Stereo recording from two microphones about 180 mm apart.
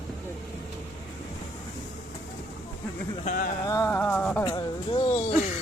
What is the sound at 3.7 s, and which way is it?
Speech, 15° left (ahead or behind).